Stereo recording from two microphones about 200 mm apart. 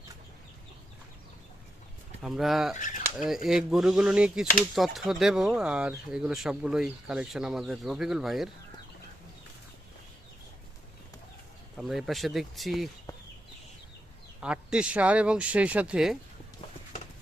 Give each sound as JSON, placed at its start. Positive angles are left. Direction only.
{"t": 2.2, "sound": "speech", "side_deg": 0}
{"t": 2.7, "sound": "speech", "side_deg": 40}
{"t": 3.2, "sound": "speech", "side_deg": 0}
{"t": 11.8, "sound": "speech", "side_deg": 0}
{"t": 14.4, "sound": "speech", "side_deg": -5}